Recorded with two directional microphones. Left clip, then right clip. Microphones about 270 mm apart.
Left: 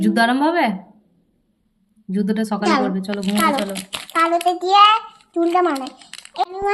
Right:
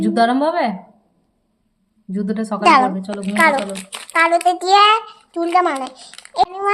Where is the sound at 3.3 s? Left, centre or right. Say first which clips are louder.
Right 5 dB; centre.